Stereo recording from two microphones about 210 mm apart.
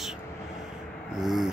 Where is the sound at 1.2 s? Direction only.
Centre (ahead or behind).